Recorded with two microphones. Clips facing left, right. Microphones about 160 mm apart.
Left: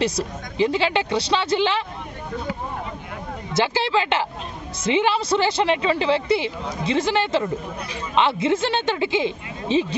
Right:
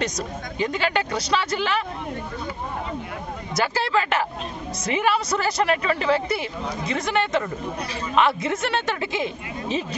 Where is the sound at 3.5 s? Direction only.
25° left (ahead or behind).